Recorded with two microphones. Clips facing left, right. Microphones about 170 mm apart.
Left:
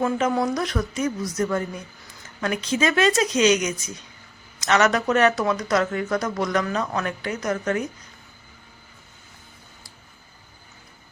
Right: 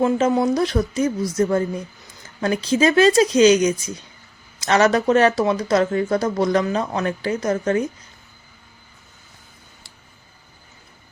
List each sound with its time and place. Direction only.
0.0 s speech: 25° right (ahead or behind)